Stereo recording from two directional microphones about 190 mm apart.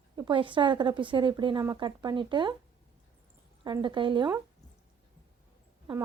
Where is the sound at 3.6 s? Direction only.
25° right (ahead or behind).